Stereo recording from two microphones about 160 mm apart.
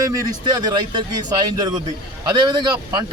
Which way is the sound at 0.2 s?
25° right (ahead or behind).